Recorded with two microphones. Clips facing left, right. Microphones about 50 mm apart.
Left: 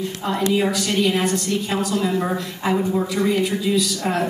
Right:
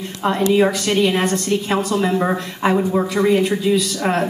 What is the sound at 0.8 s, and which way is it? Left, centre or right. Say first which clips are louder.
A woman's voice: right 3 dB; right.